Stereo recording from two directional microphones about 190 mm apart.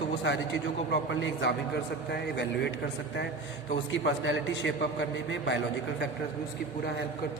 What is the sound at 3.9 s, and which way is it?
A man's voice, 75° left (ahead or behind).